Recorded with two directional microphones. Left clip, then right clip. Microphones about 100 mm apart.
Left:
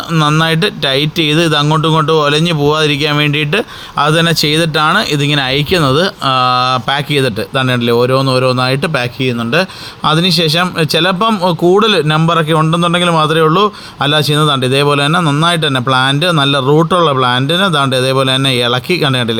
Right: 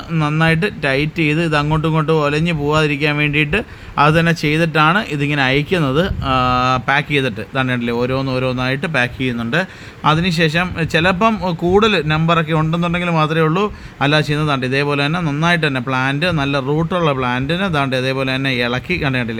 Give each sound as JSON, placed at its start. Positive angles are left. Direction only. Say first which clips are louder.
{"t": 0.2, "sound": "a man's voice", "louder": "left 5 dB", "side_deg": 45}
{"t": 0.5, "sound": "a man's voice", "louder": "left 4 dB", "side_deg": 60}
{"t": 9.0, "sound": "speech", "louder": "left 2 dB", "side_deg": 25}
{"t": 10.1, "sound": "speech", "louder": "left 4 dB", "side_deg": 35}
{"t": 11.7, "sound": "a man's voice", "louder": "left 2 dB", "side_deg": 55}
{"t": 12.2, "sound": "a man's voice", "louder": "left 5 dB", "side_deg": 40}